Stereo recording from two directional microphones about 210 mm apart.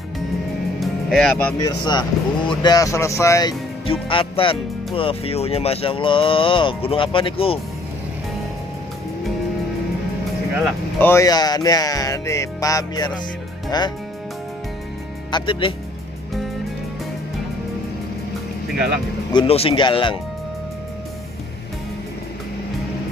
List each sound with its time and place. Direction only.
0.7 s music: centre (ahead or behind)
1.6 s speech: 20° left (ahead or behind)
11.0 s speech: 10° left (ahead or behind)
15.3 s speech: 25° left (ahead or behind)
19.3 s speech: 25° left (ahead or behind)